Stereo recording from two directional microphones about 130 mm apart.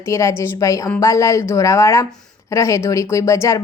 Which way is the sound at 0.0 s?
25° left (ahead or behind).